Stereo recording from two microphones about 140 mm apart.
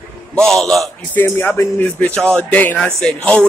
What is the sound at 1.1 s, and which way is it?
Speech, 15° left (ahead or behind).